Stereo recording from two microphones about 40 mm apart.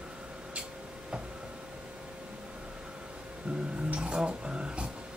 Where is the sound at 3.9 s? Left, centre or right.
Right.